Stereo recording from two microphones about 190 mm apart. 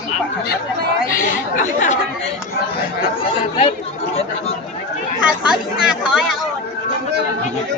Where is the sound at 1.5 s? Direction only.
40° left (ahead or behind).